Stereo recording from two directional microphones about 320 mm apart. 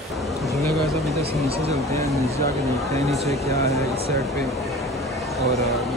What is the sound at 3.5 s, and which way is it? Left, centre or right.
Speech, centre.